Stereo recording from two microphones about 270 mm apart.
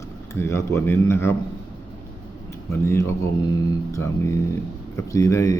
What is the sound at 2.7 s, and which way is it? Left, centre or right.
Speech, centre.